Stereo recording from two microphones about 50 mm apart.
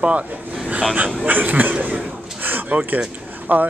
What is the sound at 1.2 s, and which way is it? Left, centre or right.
Speech, right.